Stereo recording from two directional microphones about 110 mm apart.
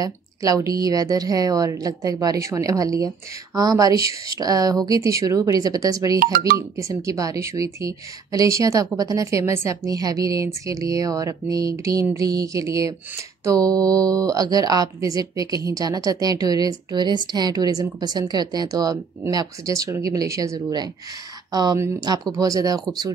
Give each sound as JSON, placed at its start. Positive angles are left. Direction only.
{"t": 0.0, "sound": "speech", "side_deg": -35}
{"t": 21.7, "sound": "speech", "side_deg": -25}